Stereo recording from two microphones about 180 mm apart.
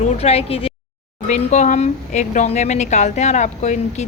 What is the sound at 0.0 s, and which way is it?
Speech, 35° left (ahead or behind).